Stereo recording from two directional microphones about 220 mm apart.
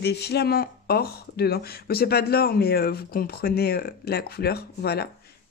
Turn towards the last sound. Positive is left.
turn(degrees=45)  # may be behind; listen again after turning